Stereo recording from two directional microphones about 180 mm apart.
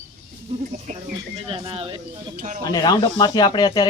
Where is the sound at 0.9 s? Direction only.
45° right (ahead or behind).